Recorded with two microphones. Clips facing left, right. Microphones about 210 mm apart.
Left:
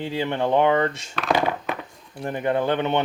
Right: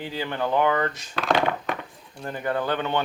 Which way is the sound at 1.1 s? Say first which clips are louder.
Right 1 dB; 5° left (ahead or behind).